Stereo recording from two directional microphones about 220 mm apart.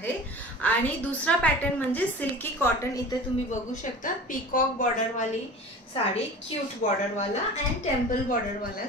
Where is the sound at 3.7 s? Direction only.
35° left (ahead or behind).